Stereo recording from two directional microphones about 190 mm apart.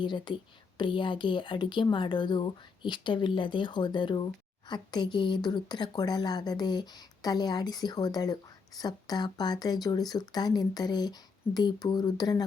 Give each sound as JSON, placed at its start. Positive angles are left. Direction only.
{"t": 0.0, "sound": "a woman's voice", "side_deg": 25}